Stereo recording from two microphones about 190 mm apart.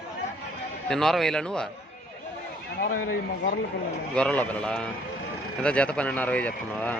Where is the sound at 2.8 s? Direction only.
50° left (ahead or behind).